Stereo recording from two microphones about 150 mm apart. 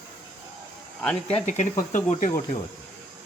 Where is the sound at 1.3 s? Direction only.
45° left (ahead or behind).